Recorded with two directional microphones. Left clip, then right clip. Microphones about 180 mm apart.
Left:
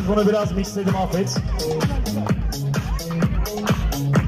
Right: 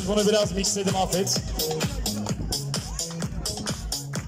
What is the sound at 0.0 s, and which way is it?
Music, 25° right (ahead or behind).